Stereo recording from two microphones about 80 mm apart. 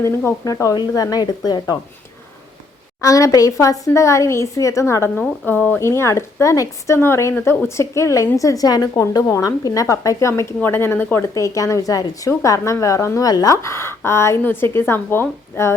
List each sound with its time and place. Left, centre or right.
0.3 s speech: left
3.0 s speech: left
5.5 s a woman's voice: left
5.8 s speech: left
10.6 s a woman's voice: left
11.3 s speech: left